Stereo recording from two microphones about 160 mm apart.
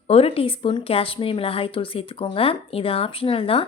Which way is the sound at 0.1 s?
35° left (ahead or behind).